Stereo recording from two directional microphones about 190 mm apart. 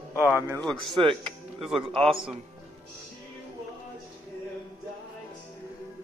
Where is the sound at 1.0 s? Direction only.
25° right (ahead or behind).